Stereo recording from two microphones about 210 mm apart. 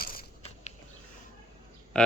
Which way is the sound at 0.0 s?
45° left (ahead or behind).